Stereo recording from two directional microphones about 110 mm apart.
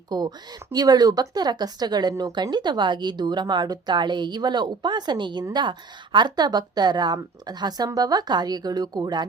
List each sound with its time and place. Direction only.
0.1 s speech: 40° right (ahead or behind)